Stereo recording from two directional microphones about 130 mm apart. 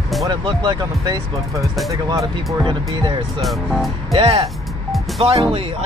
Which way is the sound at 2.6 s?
35° right (ahead or behind).